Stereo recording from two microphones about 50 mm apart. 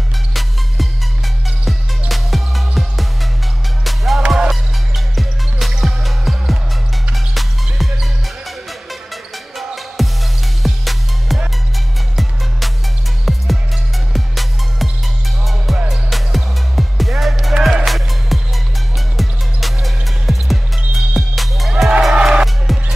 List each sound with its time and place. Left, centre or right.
0.3 s music: centre
17.6 s music: centre
17.8 s music: centre
22.1 s music: centre
22.4 s music: centre